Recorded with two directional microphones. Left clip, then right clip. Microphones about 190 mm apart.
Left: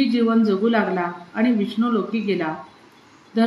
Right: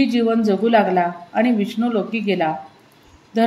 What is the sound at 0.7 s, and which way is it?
A woman's voice, 45° right (ahead or behind).